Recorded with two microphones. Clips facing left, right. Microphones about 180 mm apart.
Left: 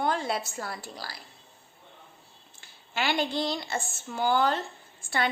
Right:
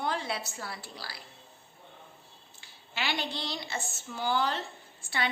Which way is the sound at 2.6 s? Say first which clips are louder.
Left 5 dB; 50° left (ahead or behind).